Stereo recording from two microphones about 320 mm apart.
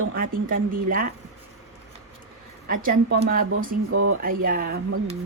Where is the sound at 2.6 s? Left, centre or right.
Right.